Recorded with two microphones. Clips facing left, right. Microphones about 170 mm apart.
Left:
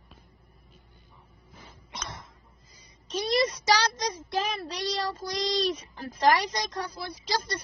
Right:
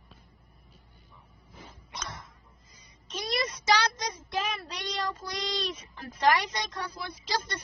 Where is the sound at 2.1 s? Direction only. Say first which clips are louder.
Left 1 dB; 30° left (ahead or behind).